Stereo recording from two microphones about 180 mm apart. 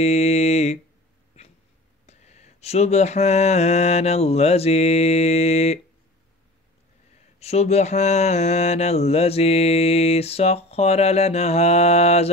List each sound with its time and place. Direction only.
0.0 s mantra: 35° left (ahead or behind)
2.0 s mantra: 40° left (ahead or behind)
7.3 s mantra: 35° left (ahead or behind)